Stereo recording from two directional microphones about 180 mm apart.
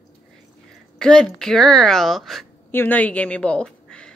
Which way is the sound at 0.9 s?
5° left (ahead or behind).